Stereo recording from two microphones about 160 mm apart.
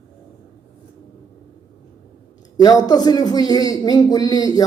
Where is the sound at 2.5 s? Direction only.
25° left (ahead or behind).